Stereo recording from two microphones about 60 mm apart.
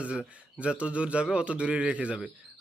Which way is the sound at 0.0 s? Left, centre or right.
Centre.